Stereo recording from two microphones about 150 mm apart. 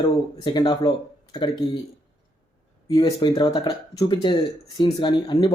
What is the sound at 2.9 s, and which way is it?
Speech, 30° left (ahead or behind).